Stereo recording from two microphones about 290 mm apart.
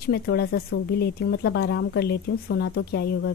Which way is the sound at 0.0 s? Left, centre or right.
Left.